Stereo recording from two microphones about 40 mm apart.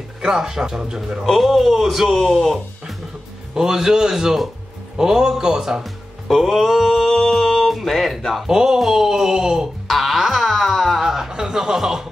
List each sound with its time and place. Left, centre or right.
0.2 s speech: centre
1.2 s a man's voice: centre
6.2 s a sound: centre
7.2 s music: centre
8.5 s speech: centre
9.8 s music: centre
11.1 s speech: centre